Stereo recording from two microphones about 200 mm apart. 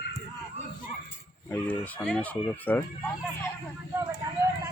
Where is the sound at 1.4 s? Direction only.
10° left (ahead or behind).